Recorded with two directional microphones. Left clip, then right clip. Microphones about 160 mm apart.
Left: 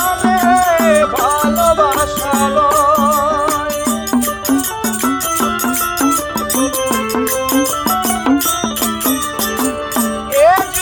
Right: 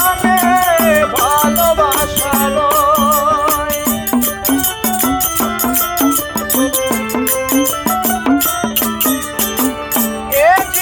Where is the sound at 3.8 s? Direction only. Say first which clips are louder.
Even; 45° right (ahead or behind).